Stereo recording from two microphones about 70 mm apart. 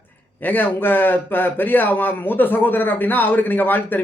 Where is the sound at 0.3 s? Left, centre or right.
Left.